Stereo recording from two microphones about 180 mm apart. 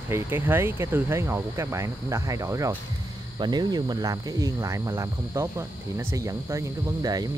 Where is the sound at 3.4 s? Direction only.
25° right (ahead or behind).